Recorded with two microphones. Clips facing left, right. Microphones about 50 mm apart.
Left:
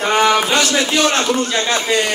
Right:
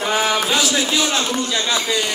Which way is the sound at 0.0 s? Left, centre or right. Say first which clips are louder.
Left 5 dB; left.